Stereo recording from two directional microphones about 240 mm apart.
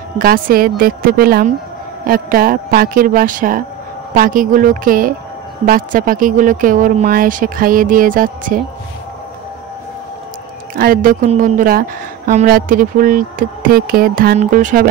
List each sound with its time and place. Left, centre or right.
0.2 s speech: right
10.8 s speech: right